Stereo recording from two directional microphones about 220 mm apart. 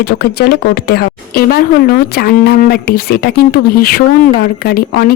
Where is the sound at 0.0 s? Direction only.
45° left (ahead or behind).